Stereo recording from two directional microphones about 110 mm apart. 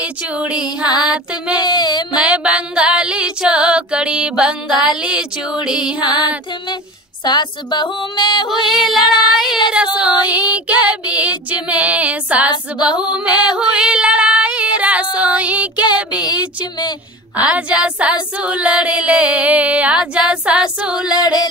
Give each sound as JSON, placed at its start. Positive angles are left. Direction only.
{"t": 0.0, "sound": "child singing", "side_deg": -10}
{"t": 0.8, "sound": "a sound", "side_deg": 40}
{"t": 2.1, "sound": "female singing", "side_deg": -10}
{"t": 4.8, "sound": "child singing", "side_deg": -5}
{"t": 7.2, "sound": "a sound", "side_deg": 40}
{"t": 8.5, "sound": "yodeling", "side_deg": 0}
{"t": 8.9, "sound": "a sound", "side_deg": 40}
{"t": 9.9, "sound": "child singing", "side_deg": -15}
{"t": 13.6, "sound": "female singing", "side_deg": -10}
{"t": 15.1, "sound": "child singing", "side_deg": -10}
{"t": 16.0, "sound": "speech", "side_deg": -10}
{"t": 17.4, "sound": "child singing", "side_deg": -10}
{"t": 21.1, "sound": "a sound", "side_deg": 40}